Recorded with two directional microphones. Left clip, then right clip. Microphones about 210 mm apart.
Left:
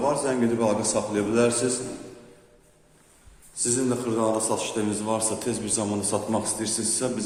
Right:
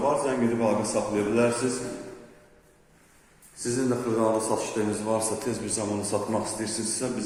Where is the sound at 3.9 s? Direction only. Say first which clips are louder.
Right 2 dB; 5° left (ahead or behind).